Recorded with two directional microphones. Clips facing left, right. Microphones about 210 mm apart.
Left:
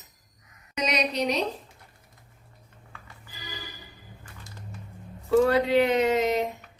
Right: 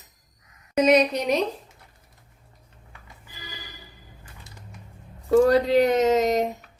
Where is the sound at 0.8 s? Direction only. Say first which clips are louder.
Right 8 dB; 50° right (ahead or behind).